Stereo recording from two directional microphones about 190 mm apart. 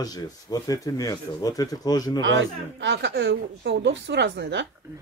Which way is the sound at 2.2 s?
75° right (ahead or behind).